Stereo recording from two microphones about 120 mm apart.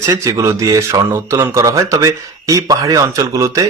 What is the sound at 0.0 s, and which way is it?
Speech, 25° right (ahead or behind).